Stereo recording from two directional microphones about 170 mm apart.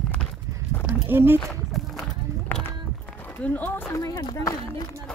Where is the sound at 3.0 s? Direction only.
10° left (ahead or behind).